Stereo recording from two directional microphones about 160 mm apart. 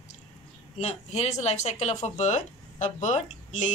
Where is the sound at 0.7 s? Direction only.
45° left (ahead or behind).